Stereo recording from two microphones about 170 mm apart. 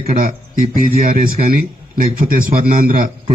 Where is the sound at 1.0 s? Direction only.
55° right (ahead or behind).